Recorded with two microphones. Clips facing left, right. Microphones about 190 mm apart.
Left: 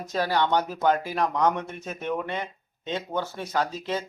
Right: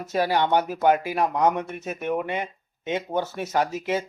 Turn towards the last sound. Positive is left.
turn(degrees=-10)  # may be behind; listen again after turning